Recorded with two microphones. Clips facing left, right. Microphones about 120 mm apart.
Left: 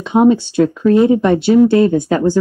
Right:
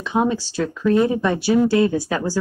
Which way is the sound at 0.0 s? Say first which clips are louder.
Left 9 dB; 20° left (ahead or behind).